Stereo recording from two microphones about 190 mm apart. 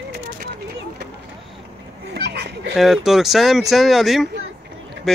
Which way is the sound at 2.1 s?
60° right (ahead or behind).